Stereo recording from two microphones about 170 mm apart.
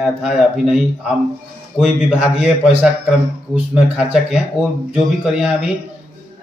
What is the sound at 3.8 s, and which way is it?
Speech, 5° right (ahead or behind).